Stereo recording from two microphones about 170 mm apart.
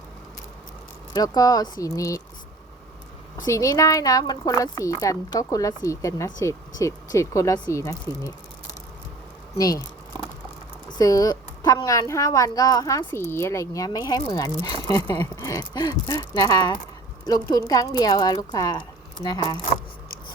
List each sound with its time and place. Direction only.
1.1 s a woman's voice: 20° left (ahead or behind)
3.4 s a woman's voice: 20° left (ahead or behind)
9.6 s a woman's voice: 20° left (ahead or behind)
10.9 s a woman's voice: 20° left (ahead or behind)